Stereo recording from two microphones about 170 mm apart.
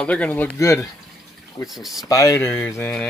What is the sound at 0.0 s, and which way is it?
Speech, 10° left (ahead or behind).